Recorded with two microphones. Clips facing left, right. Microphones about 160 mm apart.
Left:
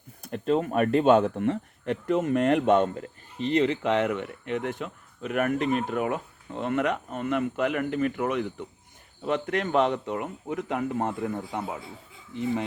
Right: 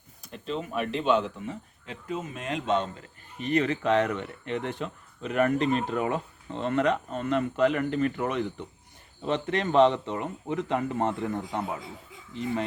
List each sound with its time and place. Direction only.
0.2 s speech: 50° left (ahead or behind)
3.3 s speech: 25° left (ahead or behind)